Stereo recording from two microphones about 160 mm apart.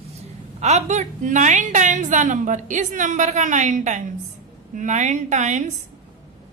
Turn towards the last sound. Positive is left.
turn(degrees=-50)  # may be behind; listen again after turning